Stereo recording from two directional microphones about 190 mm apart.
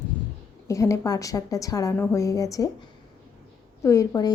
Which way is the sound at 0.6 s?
15° left (ahead or behind).